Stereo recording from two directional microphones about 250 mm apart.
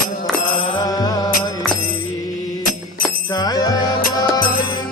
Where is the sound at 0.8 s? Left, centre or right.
Centre.